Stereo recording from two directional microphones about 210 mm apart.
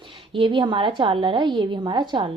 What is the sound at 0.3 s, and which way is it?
A woman's voice, 25° right (ahead or behind).